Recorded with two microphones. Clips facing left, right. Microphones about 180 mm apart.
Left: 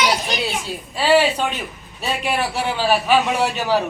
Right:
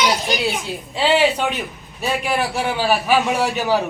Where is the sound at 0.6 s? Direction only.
20° right (ahead or behind).